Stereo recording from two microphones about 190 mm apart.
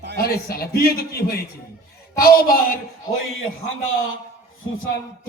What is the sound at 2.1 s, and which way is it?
Speech, 50° left (ahead or behind).